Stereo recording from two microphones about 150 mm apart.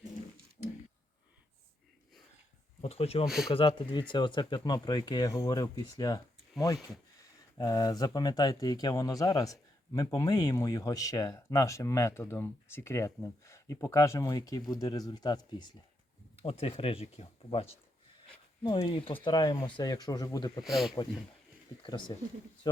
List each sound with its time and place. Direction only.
2.8 s speech: 45° left (ahead or behind)
3.2 s speech: 5° right (ahead or behind)
3.5 s speech: 35° left (ahead or behind)
7.6 s speech: 25° left (ahead or behind)
20.6 s speech: centre (ahead or behind)
21.8 s speech: 30° left (ahead or behind)
22.6 s a sound: 30° left (ahead or behind)